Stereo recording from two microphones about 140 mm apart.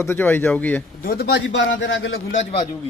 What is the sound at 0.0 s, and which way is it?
Speech, 15° left (ahead or behind).